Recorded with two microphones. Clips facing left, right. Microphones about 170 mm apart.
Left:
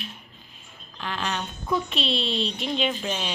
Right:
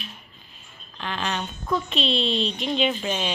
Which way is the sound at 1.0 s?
5° left (ahead or behind).